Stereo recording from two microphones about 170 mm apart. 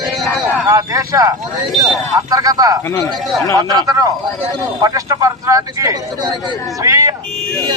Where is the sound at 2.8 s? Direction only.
20° left (ahead or behind).